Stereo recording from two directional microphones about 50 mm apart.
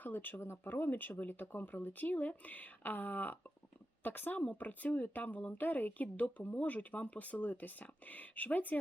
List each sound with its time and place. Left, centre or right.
0.0 s speech: left
0.4 s speech: left
0.7 s speech: left